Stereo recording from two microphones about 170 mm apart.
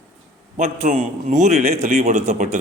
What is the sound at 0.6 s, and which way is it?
A man's voice, 40° right (ahead or behind).